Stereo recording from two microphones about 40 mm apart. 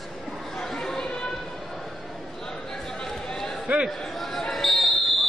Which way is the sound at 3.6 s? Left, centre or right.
Right.